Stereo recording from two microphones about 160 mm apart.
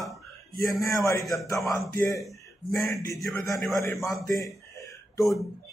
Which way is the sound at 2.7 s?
20° left (ahead or behind).